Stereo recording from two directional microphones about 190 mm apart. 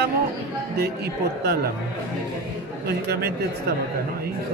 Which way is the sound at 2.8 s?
55° right (ahead or behind).